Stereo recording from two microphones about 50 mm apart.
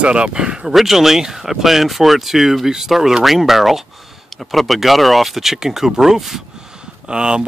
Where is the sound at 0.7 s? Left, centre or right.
Centre.